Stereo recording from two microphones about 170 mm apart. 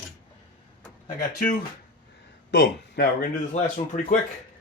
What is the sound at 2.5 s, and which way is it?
Speech, 85° left.